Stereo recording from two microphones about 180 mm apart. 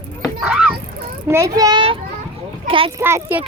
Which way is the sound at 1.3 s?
15° right (ahead or behind).